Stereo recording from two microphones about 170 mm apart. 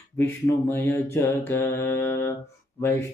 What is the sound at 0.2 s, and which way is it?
Mantra, 10° left (ahead or behind).